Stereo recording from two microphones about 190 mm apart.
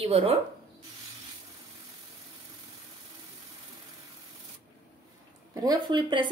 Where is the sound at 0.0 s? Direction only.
30° right (ahead or behind).